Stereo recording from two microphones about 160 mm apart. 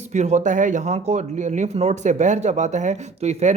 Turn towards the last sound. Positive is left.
turn(degrees=-45)  # may be behind; listen again after turning